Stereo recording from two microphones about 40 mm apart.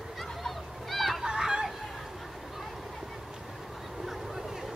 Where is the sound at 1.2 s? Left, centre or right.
Centre.